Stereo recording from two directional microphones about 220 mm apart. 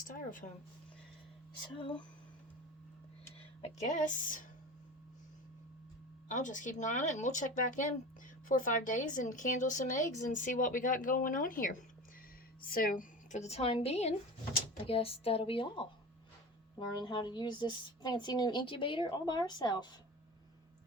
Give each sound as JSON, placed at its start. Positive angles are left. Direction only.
{"t": 0.0, "sound": "speech", "side_deg": 40}
{"t": 1.7, "sound": "a woman's voice", "side_deg": 20}
{"t": 3.6, "sound": "speech", "side_deg": 35}
{"t": 6.2, "sound": "a woman's voice", "side_deg": 35}
{"t": 17.0, "sound": "a woman's voice", "side_deg": 20}